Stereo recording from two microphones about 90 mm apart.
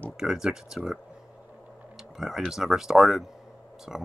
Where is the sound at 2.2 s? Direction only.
5° right (ahead or behind).